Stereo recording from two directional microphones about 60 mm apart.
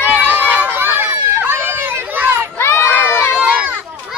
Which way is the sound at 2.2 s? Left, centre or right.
Right.